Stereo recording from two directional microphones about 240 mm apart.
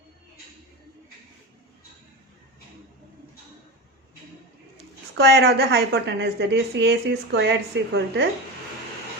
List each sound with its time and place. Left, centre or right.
5.1 s a woman's voice: right